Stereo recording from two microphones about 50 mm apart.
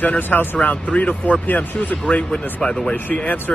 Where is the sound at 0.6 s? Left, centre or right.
Left.